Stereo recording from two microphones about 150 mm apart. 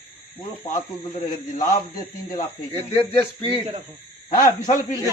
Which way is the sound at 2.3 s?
25° left (ahead or behind).